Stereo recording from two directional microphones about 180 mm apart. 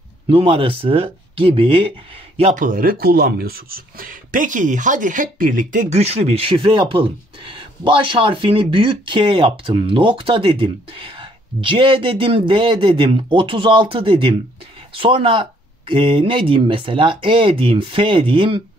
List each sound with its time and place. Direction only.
0.3 s speech: 30° right (ahead or behind)
2.6 s speech: 50° right (ahead or behind); by 18.6 s 30° right (ahead or behind)